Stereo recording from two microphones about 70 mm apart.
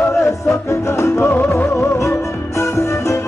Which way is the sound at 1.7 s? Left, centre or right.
Left.